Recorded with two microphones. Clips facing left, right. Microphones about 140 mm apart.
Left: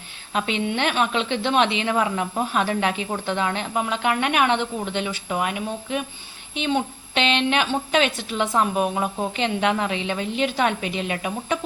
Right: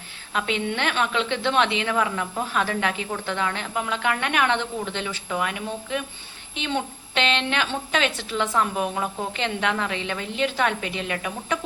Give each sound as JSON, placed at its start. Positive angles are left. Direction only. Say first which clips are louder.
{"t": 0.3, "sound": "a woman's voice", "louder": "left 2 dB", "side_deg": 20}